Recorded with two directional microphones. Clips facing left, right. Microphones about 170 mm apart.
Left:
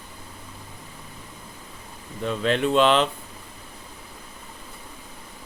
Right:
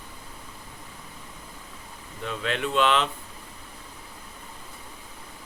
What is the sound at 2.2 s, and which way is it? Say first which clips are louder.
Speech: left 6 dB; 35° left (ahead or behind).